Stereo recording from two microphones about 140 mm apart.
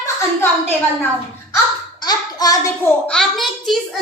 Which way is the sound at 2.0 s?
25° left (ahead or behind).